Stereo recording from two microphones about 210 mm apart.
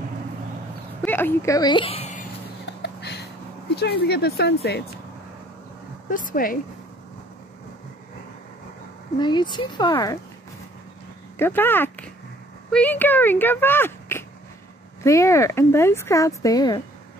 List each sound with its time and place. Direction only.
1.0 s speech: 10° left (ahead or behind); by 2.2 s 30° left (ahead or behind)
2.6 s a sound: 55° left (ahead or behind)
3.7 s speech: 50° left (ahead or behind)
6.0 s speech: 40° left (ahead or behind)
9.2 s speech: 20° left (ahead or behind)
11.3 s speech: 10° left (ahead or behind)